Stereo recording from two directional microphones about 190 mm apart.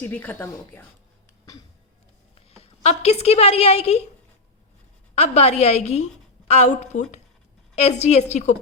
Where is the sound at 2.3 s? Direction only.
30° left (ahead or behind).